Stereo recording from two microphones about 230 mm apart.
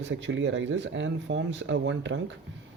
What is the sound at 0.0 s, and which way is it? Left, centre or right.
Speech, right.